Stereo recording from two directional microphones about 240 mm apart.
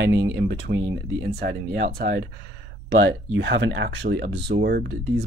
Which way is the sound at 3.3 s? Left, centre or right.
Right.